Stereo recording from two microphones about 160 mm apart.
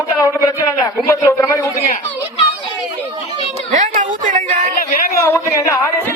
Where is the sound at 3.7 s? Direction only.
50° right (ahead or behind).